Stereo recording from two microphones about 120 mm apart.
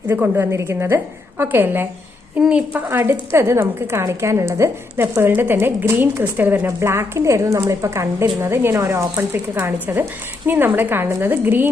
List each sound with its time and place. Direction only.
0.1 s a woman's voice: 20° right (ahead or behind)